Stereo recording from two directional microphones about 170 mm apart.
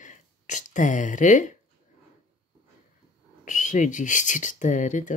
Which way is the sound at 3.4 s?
50° left (ahead or behind).